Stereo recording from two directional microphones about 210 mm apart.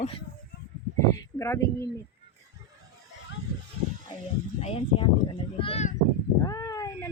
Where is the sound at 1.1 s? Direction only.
15° left (ahead or behind).